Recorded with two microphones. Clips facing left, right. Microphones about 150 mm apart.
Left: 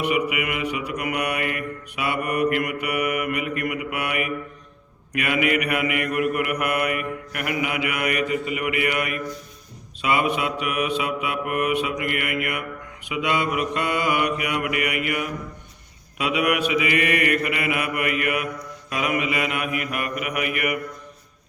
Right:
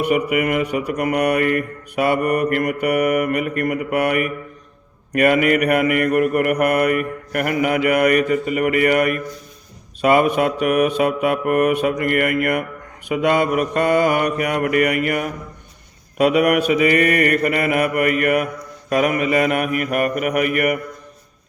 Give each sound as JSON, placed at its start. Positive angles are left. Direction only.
{"t": 0.0, "sound": "mantra", "side_deg": -45}